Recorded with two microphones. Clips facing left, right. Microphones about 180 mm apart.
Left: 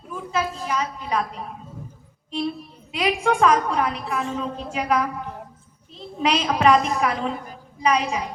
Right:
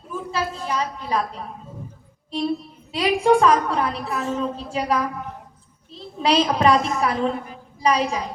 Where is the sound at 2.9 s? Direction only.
35° right (ahead or behind).